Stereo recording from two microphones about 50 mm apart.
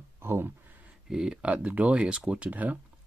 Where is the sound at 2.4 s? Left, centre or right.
Right.